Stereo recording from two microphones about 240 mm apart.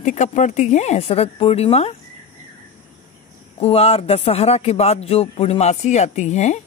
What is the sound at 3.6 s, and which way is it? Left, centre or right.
Speech, left.